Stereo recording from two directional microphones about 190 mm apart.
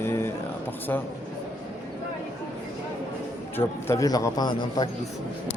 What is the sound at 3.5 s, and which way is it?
A man's voice, 15° left (ahead or behind).